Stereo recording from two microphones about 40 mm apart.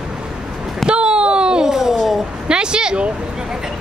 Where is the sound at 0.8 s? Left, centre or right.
Right.